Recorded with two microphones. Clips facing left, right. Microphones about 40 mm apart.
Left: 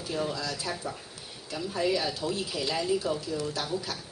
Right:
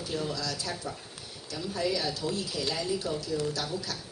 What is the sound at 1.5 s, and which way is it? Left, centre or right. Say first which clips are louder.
Speech: left 2 dB; left.